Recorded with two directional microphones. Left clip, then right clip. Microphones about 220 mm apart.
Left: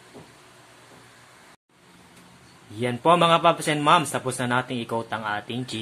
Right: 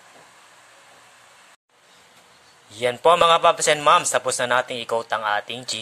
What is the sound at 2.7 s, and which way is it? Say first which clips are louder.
A man's voice: right 3 dB; 30° right (ahead or behind).